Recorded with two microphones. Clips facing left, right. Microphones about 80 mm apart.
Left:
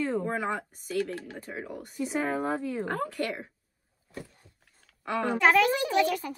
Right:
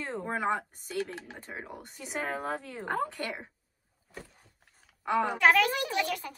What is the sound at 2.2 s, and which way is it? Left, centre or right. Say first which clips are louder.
Speech: left 5 dB; left.